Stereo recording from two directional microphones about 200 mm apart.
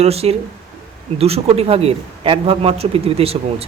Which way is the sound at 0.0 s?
30° right (ahead or behind).